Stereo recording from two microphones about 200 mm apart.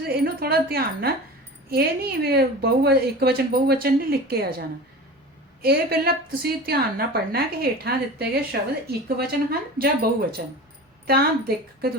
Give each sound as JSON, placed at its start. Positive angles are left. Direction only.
{"t": 0.0, "sound": "a sound", "side_deg": -50}
{"t": 1.7, "sound": "a woman's voice", "side_deg": -50}
{"t": 5.6, "sound": "a woman's voice", "side_deg": -50}